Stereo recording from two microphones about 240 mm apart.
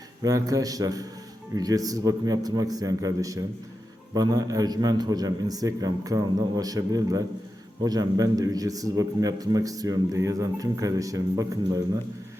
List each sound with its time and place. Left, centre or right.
0.2 s speech: centre